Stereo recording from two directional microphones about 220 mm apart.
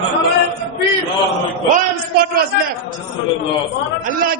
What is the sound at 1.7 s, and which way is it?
Speech, 40° right (ahead or behind).